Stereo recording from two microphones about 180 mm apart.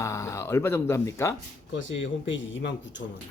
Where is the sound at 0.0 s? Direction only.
15° left (ahead or behind).